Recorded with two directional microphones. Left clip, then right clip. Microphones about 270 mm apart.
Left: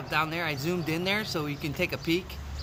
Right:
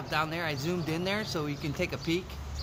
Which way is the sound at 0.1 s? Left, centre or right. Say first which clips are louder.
Left 3 dB; centre.